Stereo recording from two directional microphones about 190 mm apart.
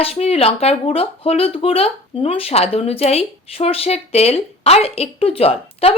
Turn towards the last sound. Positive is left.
turn(degrees=30)  # may be behind; listen again after turning